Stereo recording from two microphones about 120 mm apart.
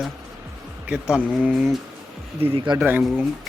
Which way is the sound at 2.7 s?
40° right (ahead or behind).